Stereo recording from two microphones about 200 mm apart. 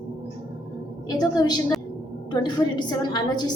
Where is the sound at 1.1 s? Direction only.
20° left (ahead or behind).